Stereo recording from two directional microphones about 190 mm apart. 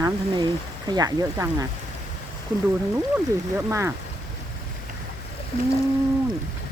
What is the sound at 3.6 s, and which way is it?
Speech, 15° right (ahead or behind).